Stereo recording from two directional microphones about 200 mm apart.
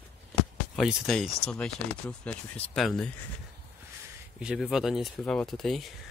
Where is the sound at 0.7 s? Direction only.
Centre (ahead or behind).